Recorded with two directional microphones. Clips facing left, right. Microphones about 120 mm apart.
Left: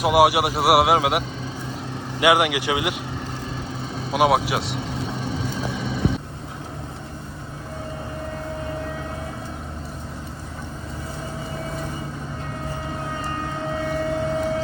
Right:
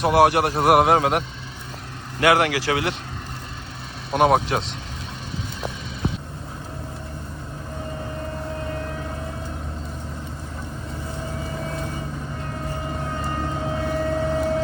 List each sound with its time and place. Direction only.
0.0 s a man's voice: 10° left (ahead or behind)
2.2 s a man's voice: 15° left (ahead or behind)
4.1 s speech: 5° left (ahead or behind)
13.8 s vehicle: centre (ahead or behind)